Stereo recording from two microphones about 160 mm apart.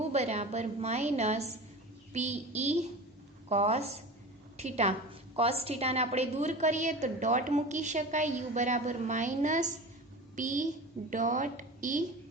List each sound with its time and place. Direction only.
0.0 s a woman's voice: 45° right (ahead or behind)